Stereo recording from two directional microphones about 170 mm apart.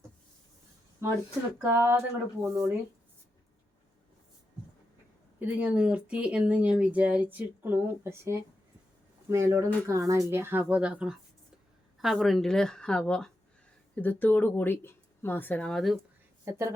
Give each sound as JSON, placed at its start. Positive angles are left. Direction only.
{"t": 1.0, "sound": "speech", "side_deg": -15}
{"t": 5.4, "sound": "a woman's voice", "side_deg": -10}
{"t": 16.5, "sound": "speech", "side_deg": -15}